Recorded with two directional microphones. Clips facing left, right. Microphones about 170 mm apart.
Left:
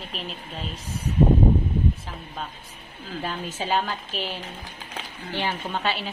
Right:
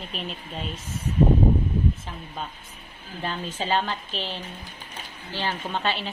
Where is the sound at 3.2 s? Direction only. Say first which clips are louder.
Right 1 dB; 5° left (ahead or behind).